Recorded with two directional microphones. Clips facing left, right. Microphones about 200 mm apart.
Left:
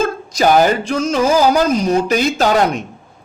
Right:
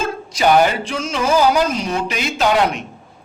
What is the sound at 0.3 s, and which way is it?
A man's voice, 40° left (ahead or behind).